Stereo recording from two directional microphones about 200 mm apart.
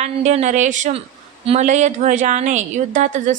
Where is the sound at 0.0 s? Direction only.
35° right (ahead or behind).